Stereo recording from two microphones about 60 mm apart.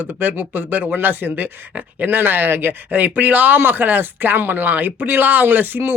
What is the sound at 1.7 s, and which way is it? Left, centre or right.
Speech, right.